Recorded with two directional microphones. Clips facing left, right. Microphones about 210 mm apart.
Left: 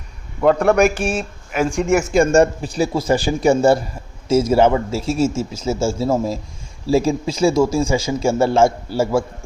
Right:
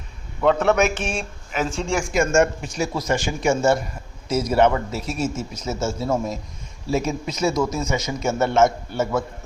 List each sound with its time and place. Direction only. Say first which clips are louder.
0.9 s speech: left 6 dB; 10° left (ahead or behind)
2.0 s speech: left 3 dB; 30° left (ahead or behind)